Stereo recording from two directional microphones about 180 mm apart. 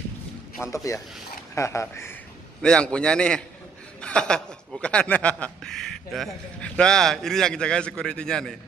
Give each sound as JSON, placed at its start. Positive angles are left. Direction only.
{"t": 0.9, "sound": "speech", "side_deg": 20}